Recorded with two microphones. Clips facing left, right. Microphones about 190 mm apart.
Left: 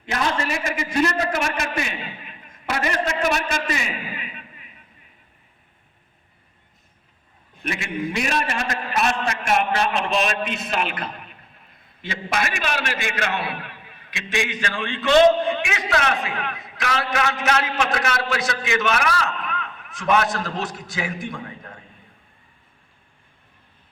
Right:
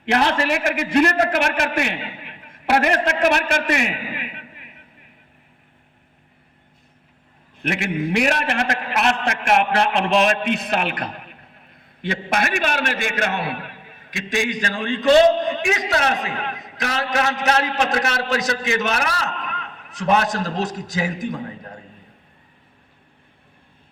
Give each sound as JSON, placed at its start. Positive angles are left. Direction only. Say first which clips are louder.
{"t": 0.0, "sound": "a man's voice", "louder": "right 5 dB", "side_deg": -70}
{"t": 7.6, "sound": "a man's voice", "louder": "right 4 dB", "side_deg": -65}